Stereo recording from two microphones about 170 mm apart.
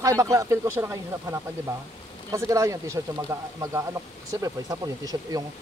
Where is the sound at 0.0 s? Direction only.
20° right (ahead or behind).